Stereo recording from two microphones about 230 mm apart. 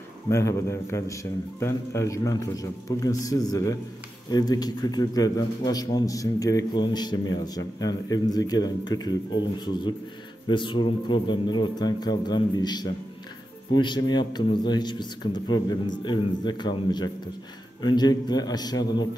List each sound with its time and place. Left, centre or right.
0.3 s a man's voice: centre